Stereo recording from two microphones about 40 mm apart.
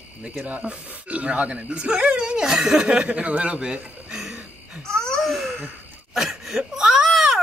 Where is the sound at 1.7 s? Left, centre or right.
Right.